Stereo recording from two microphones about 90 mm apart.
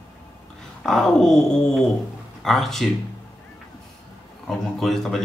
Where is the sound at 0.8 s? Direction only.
5° left (ahead or behind).